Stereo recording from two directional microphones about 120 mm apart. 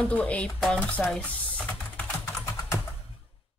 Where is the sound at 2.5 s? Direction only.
25° left (ahead or behind).